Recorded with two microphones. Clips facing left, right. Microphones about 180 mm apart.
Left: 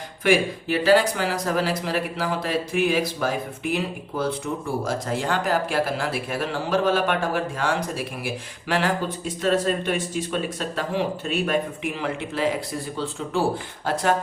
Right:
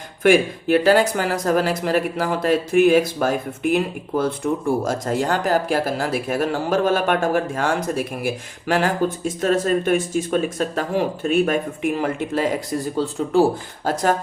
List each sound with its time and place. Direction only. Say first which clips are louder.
0.2 s speech: right 5 dB; 50° right (ahead or behind)